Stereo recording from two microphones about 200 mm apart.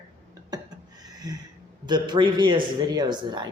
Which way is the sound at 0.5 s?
20° right (ahead or behind).